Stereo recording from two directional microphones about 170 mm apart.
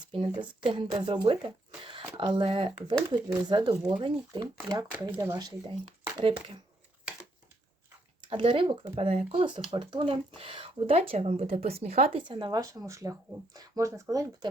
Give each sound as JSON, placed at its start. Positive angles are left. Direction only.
{"t": 0.1, "sound": "speech", "side_deg": -30}
{"t": 8.2, "sound": "speech", "side_deg": -30}